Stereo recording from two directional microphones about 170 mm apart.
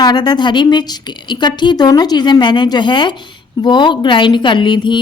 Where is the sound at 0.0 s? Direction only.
25° left (ahead or behind).